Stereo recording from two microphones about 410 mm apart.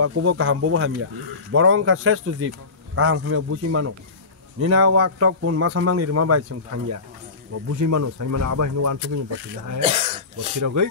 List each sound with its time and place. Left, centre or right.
0.0 s speech: right
9.8 s speech: centre
10.6 s speech: right